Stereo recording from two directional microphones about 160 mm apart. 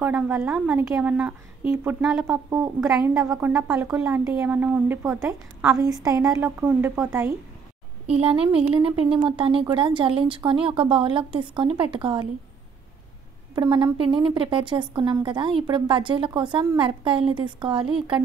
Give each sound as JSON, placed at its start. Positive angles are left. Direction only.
{"t": 0.0, "sound": "a woman's voice", "side_deg": -5}
{"t": 6.0, "sound": "speech", "side_deg": -20}
{"t": 6.6, "sound": "a woman's voice", "side_deg": -10}
{"t": 8.1, "sound": "a woman's voice", "side_deg": -35}
{"t": 8.5, "sound": "a woman's voice", "side_deg": -5}
{"t": 8.8, "sound": "a woman's voice", "side_deg": -35}
{"t": 13.6, "sound": "a woman's voice", "side_deg": -25}